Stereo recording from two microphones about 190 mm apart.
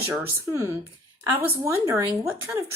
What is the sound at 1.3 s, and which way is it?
A woman's voice, 10° right (ahead or behind).